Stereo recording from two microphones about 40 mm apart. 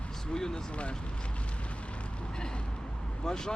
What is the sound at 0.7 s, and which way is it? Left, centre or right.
Speech, left.